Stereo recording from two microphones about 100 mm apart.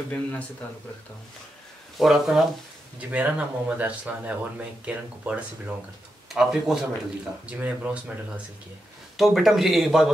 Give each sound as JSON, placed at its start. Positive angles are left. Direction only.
{"t": 0.1, "sound": "speech", "side_deg": 15}
{"t": 2.0, "sound": "speech", "side_deg": -5}
{"t": 3.0, "sound": "speech", "side_deg": -15}
{"t": 9.1, "sound": "speech", "side_deg": 0}